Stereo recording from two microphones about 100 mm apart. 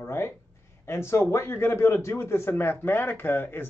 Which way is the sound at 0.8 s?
25° left (ahead or behind).